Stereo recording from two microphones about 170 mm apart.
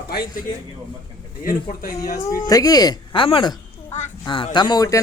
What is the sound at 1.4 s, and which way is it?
Speech, 55° left (ahead or behind).